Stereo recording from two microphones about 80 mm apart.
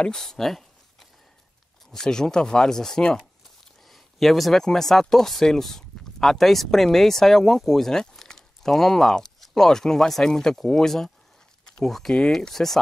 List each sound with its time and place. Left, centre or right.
0.0 s speech: centre